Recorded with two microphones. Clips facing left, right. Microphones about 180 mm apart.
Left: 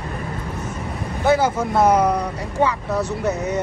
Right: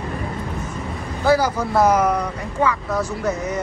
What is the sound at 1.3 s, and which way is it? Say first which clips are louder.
Speech: even; 25° left (ahead or behind).